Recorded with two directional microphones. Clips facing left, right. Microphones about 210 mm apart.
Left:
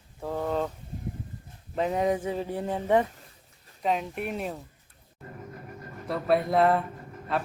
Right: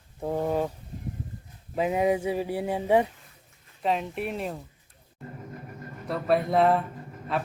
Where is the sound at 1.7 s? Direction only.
10° right (ahead or behind).